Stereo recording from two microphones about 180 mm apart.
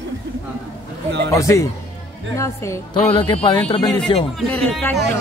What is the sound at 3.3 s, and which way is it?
Speech, 30° left (ahead or behind).